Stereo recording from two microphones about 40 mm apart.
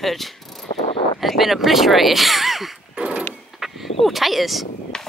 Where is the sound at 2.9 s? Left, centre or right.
Right.